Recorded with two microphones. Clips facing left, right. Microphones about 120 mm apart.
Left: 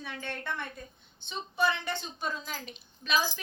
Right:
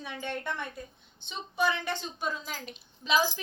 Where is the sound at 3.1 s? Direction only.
25° right (ahead or behind).